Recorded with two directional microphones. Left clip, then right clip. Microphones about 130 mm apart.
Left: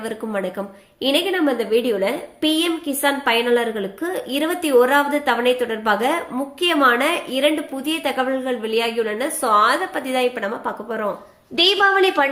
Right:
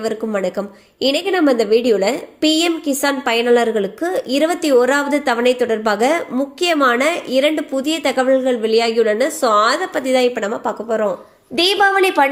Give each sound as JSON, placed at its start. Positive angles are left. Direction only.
{"t": 0.0, "sound": "a woman's voice", "side_deg": -45}
{"t": 1.0, "sound": "a woman's voice", "side_deg": -55}